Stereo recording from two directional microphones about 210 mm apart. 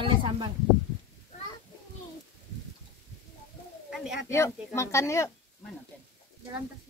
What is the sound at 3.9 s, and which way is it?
Speech, 5° right (ahead or behind).